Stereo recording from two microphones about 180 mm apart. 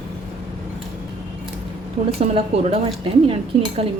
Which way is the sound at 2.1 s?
30° right (ahead or behind).